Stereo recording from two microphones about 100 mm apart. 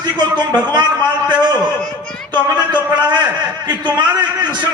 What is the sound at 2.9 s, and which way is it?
A man's voice, 45° right (ahead or behind).